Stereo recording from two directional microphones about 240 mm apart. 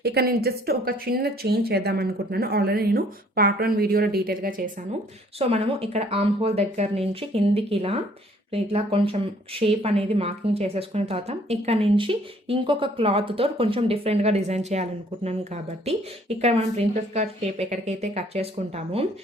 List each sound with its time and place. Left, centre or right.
0.0 s speech: right
5.4 s speech: right
16.4 s speech: right